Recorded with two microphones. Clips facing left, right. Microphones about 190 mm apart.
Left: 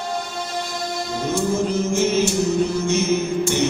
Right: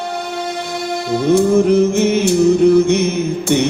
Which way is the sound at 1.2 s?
60° right (ahead or behind).